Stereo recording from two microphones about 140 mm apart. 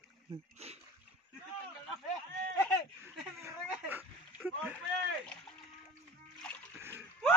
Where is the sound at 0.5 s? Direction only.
50° right (ahead or behind).